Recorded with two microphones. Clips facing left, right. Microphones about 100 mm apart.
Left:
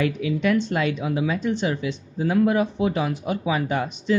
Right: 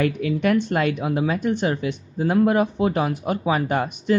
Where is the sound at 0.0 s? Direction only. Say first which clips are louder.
Right 2 dB; 50° right (ahead or behind).